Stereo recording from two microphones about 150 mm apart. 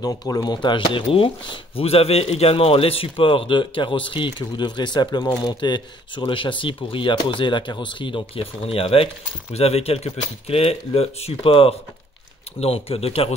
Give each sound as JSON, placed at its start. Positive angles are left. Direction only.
{"t": 0.0, "sound": "speech", "side_deg": 25}